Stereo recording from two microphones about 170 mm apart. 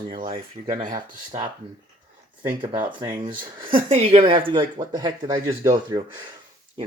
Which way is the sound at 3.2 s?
30° right (ahead or behind).